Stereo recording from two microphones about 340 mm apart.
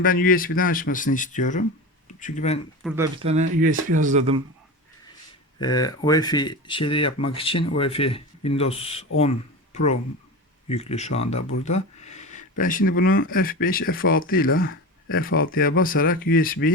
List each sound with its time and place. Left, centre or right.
0.0 s speech: left
2.8 s speech: centre
5.5 s speech: centre
10.7 s speech: centre